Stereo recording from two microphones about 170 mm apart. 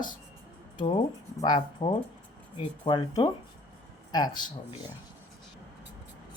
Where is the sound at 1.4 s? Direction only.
25° left (ahead or behind).